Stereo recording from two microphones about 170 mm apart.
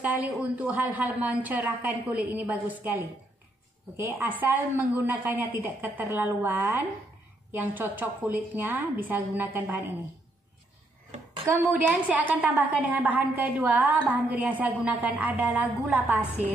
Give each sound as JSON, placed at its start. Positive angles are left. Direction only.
{"t": 0.0, "sound": "a woman's voice", "side_deg": -10}
{"t": 11.4, "sound": "a woman's voice", "side_deg": -10}